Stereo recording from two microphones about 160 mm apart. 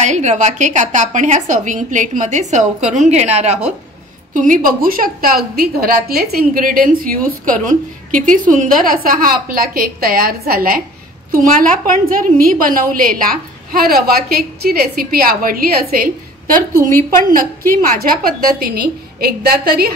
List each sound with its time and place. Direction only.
0.0 s a woman's voice: 45° right (ahead or behind)
4.3 s a woman's voice: 55° right (ahead or behind)
17.3 s a woman's voice: 60° right (ahead or behind)